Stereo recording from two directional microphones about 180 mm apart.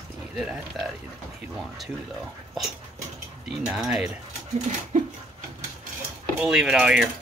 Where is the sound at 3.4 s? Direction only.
5° right (ahead or behind).